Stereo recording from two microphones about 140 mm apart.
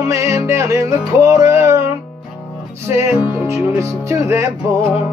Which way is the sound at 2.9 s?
15° right (ahead or behind).